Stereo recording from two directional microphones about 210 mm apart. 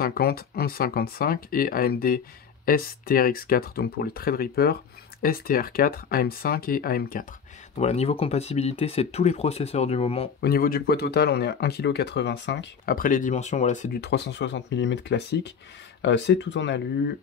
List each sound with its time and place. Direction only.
0.0 s speech: 45° left (ahead or behind)
7.8 s speech: 30° left (ahead or behind)
10.4 s speech: 45° left (ahead or behind)
14.0 s speech: 55° left (ahead or behind)